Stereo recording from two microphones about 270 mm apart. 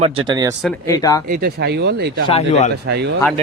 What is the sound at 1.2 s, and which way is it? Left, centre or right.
Speech, right.